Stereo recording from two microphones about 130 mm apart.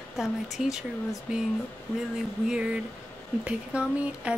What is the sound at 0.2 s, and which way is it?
Speech, 5° right (ahead or behind).